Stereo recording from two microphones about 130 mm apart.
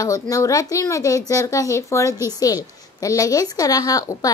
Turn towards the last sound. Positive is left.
turn(degrees=25)  # may be behind; listen again after turning